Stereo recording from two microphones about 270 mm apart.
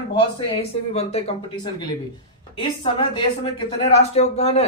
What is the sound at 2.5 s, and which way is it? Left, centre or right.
Speech, centre.